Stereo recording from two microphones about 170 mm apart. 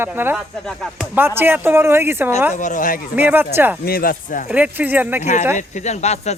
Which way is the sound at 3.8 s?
60° left (ahead or behind).